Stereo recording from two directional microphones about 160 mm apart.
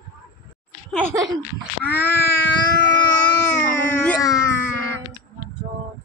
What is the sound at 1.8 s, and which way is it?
Wail, 15° left (ahead or behind).